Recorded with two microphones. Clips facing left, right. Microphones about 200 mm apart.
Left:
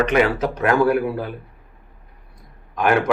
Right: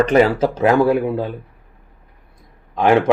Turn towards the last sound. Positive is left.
turn(degrees=-25)  # may be behind; listen again after turning